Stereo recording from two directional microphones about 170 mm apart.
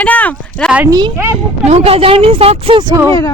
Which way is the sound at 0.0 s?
10° left (ahead or behind).